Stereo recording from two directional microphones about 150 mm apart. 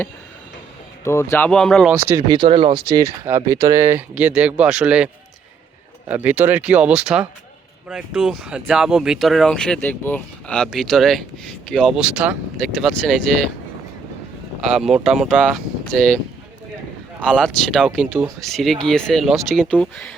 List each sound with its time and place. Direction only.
1.0 s speech: 15° left (ahead or behind)
1.5 s speech: 5° left (ahead or behind)
1.9 s speech: 15° right (ahead or behind)
2.2 s speech: 35° right (ahead or behind)
2.9 s speech: 20° right (ahead or behind)
6.1 s speech: 10° right (ahead or behind)
14.7 s speech: 5° right (ahead or behind)
18.3 s speech: centre (ahead or behind)